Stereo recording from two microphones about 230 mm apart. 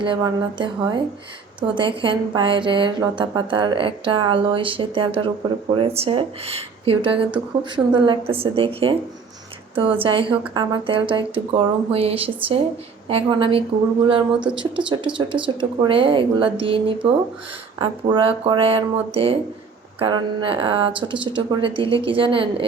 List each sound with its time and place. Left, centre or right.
0.0 s a woman's voice: right